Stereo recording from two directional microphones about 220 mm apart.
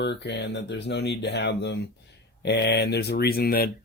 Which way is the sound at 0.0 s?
50° left (ahead or behind).